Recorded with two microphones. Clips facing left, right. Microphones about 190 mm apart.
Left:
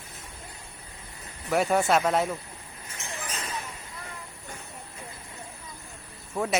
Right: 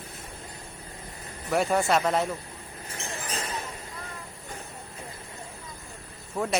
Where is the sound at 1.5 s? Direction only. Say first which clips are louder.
Left 1 dB; centre (ahead or behind).